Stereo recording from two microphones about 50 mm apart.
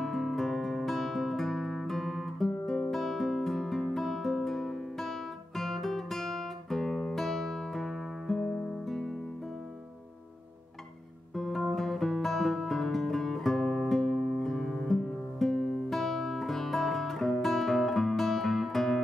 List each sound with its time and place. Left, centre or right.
0.0 s guitar: centre
11.3 s music: centre